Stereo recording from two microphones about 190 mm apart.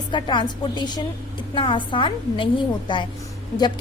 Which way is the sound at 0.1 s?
25° left (ahead or behind).